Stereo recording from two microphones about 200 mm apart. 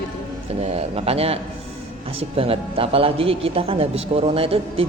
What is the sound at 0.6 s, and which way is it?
Mantra, 30° right (ahead or behind).